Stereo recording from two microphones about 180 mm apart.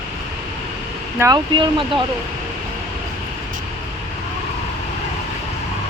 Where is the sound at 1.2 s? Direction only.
20° right (ahead or behind).